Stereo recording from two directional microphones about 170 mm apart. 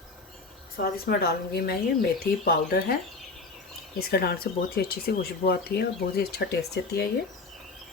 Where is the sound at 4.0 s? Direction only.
65° left (ahead or behind).